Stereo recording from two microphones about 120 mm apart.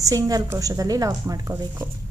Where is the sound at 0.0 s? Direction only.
30° right (ahead or behind).